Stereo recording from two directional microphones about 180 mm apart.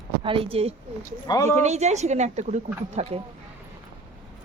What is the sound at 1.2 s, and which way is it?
Speech, 20° left (ahead or behind).